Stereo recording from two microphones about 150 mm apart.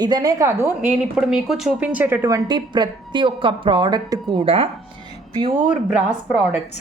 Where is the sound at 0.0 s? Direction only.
25° right (ahead or behind).